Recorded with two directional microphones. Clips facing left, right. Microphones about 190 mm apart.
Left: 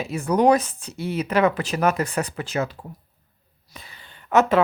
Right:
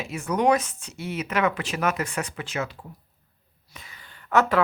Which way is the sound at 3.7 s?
35° left (ahead or behind).